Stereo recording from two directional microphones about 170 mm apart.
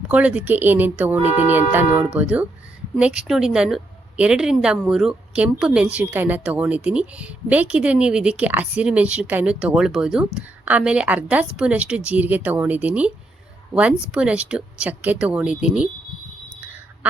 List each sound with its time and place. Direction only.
0.1 s a woman's voice: 10° right (ahead or behind)
14.1 s speech: 5° right (ahead or behind)
16.6 s a sound: 10° right (ahead or behind)